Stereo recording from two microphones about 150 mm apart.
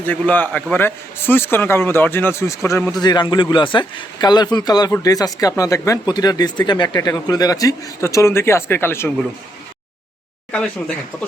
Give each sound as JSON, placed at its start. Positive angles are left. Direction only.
{"t": 0.0, "sound": "a man's voice", "side_deg": 10}
{"t": 10.5, "sound": "speech", "side_deg": 5}